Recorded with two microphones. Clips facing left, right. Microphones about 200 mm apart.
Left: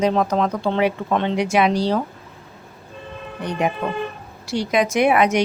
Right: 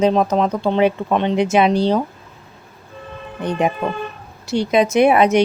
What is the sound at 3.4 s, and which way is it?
A woman's voice, 25° right (ahead or behind).